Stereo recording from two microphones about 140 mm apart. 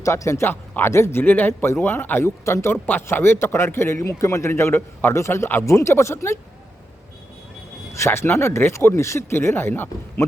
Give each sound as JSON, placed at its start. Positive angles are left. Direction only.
{"t": 0.0, "sound": "a man's voice", "side_deg": 20}
{"t": 7.9, "sound": "a man's voice", "side_deg": 20}